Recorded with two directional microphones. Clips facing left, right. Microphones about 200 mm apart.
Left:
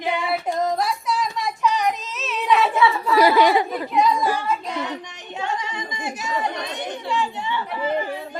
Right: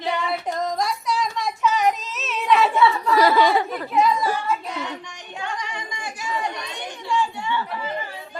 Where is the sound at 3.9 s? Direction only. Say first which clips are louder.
Even; centre (ahead or behind).